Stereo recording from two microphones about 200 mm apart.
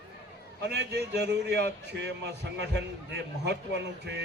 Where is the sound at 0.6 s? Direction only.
60° right (ahead or behind).